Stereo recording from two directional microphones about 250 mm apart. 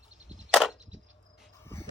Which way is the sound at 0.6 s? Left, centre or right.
Centre.